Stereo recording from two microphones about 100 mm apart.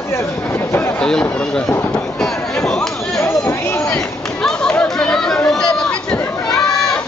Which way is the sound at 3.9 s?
5° left (ahead or behind).